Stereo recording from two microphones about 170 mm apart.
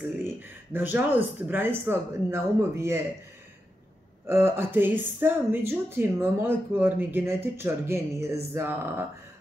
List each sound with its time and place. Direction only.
0.7 s speech: 10° right (ahead or behind)
4.3 s speech: 15° right (ahead or behind)